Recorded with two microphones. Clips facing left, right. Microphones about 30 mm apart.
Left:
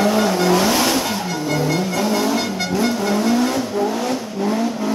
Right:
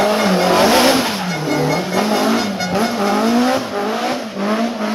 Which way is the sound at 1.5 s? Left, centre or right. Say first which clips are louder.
Right 3 dB; centre.